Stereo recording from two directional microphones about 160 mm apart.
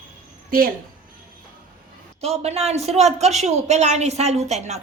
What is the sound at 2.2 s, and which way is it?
A woman's voice, 40° right (ahead or behind).